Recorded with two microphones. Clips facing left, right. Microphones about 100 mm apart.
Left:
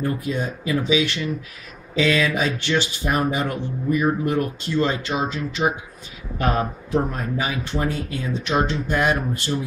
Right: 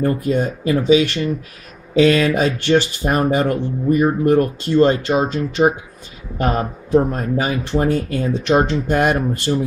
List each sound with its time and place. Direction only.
0.0 s speech: 45° right (ahead or behind)